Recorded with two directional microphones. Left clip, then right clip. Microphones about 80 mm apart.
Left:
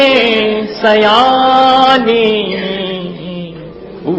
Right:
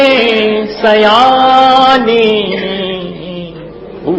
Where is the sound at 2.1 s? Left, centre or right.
Centre.